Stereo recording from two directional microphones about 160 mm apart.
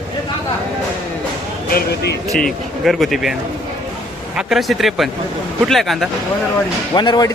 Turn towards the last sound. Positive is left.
turn(degrees=25)  # may be behind; listen again after turning